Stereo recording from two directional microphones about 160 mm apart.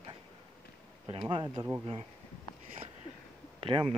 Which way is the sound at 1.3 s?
30° right (ahead or behind).